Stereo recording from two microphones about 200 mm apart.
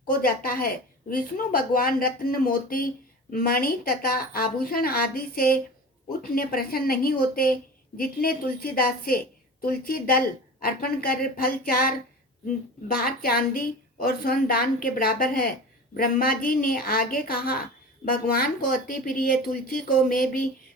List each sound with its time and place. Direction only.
0.1 s a woman's voice: 45° left (ahead or behind)